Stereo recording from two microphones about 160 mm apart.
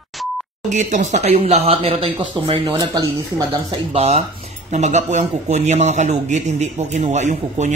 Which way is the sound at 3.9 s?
40° right (ahead or behind).